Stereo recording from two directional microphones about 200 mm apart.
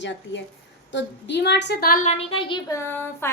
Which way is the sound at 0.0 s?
65° left (ahead or behind).